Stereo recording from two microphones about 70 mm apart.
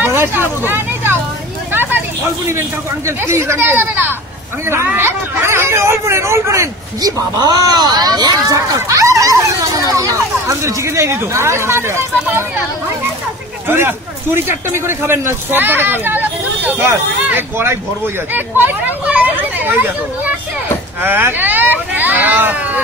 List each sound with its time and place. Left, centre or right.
0.0 s vehicle: right
1.7 s a sound: right
3.1 s speech: right
7.0 s speech: right
8.5 s speech: right
13.7 s speech: right